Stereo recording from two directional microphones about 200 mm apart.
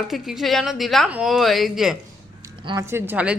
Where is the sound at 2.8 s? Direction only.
10° right (ahead or behind).